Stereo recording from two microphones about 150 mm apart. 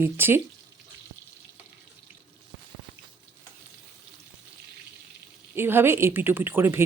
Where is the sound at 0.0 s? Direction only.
15° right (ahead or behind).